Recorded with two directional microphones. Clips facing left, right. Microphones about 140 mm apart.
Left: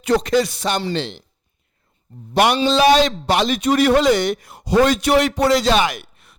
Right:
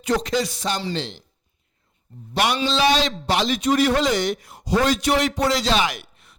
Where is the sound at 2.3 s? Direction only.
50° left (ahead or behind).